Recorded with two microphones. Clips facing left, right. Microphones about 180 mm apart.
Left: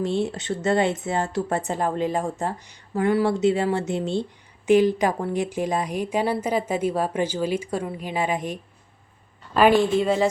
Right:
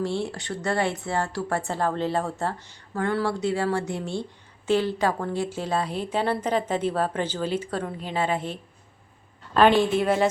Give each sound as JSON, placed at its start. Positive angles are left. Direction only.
{"t": 0.0, "sound": "speech", "side_deg": 20}